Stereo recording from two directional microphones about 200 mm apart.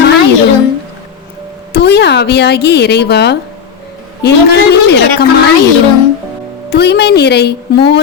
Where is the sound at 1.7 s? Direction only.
55° left (ahead or behind).